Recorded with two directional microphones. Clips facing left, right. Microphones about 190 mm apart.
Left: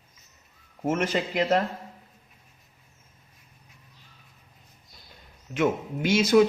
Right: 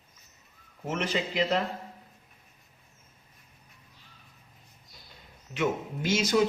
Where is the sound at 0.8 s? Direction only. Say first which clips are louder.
Left 5 dB; 45° left (ahead or behind).